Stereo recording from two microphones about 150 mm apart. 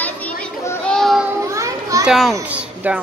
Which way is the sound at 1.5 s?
20° right (ahead or behind).